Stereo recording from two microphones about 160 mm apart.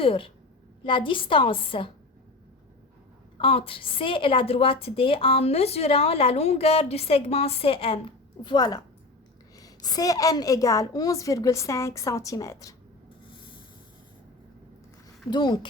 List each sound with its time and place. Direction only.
0.0 s a woman's voice: 35° left (ahead or behind)
3.3 s a woman's voice: 35° left (ahead or behind)
15.3 s a woman's voice: 25° left (ahead or behind)